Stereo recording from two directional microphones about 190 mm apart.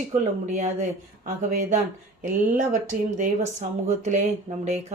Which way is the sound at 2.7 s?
40° right (ahead or behind).